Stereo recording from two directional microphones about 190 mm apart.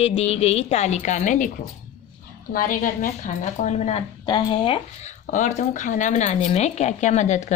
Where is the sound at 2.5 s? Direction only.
45° left (ahead or behind).